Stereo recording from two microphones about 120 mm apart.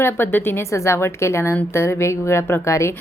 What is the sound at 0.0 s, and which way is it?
Speech, 20° left (ahead or behind).